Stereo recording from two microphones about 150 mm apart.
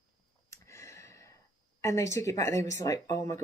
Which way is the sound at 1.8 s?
20° left (ahead or behind).